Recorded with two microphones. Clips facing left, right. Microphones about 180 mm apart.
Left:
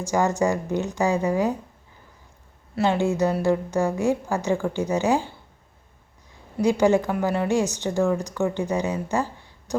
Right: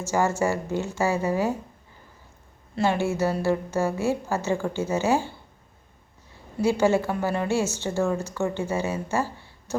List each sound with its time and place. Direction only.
0.0 s a woman's voice: 15° left (ahead or behind)
3.0 s a woman's voice: 15° left (ahead or behind)
6.6 s a woman's voice: 15° left (ahead or behind)